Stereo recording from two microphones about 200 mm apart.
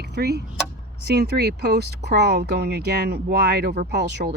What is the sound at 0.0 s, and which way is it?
Speech, 55° right (ahead or behind).